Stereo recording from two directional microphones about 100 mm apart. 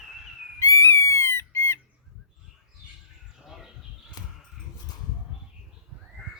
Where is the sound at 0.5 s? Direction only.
30° left (ahead or behind).